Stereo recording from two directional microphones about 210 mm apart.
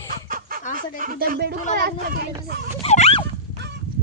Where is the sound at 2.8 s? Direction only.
30° left (ahead or behind).